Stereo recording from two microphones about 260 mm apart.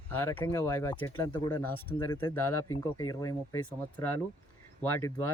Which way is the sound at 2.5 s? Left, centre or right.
Left.